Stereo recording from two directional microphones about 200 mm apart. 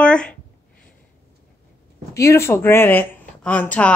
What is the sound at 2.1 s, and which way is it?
A woman's voice, 15° left (ahead or behind).